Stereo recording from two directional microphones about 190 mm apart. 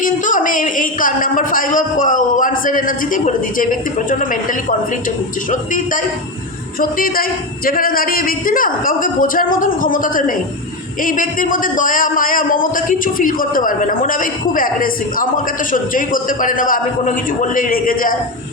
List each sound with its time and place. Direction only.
0.0 s a man's voice: 45° left (ahead or behind)
5.5 s a man's voice: 45° left (ahead or behind)